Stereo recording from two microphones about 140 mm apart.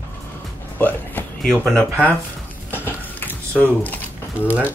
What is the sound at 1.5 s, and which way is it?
Speech, 5° left (ahead or behind).